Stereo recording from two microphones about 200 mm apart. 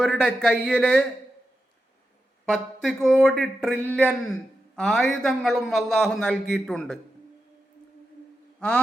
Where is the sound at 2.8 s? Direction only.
Centre (ahead or behind).